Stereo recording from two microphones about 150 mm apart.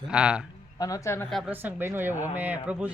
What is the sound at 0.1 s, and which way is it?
Speech, 5° right (ahead or behind).